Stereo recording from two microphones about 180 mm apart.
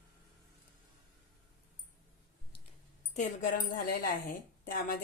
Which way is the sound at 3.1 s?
45° left (ahead or behind).